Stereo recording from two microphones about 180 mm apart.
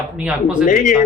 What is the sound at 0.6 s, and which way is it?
Speech, 45° left (ahead or behind).